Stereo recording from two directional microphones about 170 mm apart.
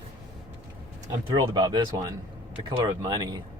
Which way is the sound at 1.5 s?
25° right (ahead or behind).